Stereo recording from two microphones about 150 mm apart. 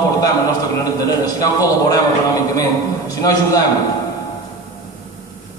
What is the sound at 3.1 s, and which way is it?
Speech, 25° left (ahead or behind).